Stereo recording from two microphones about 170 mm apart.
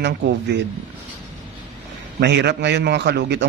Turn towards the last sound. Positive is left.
turn(degrees=-85)